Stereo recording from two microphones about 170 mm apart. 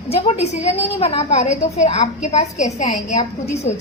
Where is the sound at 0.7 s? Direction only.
35° left (ahead or behind).